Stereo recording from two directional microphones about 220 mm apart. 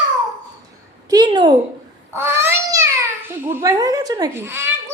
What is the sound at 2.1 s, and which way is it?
Babbling, 10° right (ahead or behind).